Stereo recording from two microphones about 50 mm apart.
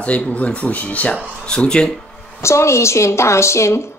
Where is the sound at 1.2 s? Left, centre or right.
Centre.